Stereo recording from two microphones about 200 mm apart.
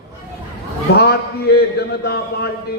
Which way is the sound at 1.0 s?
55° left (ahead or behind).